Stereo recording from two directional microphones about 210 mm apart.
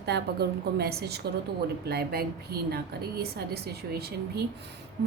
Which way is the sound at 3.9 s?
50° right (ahead or behind).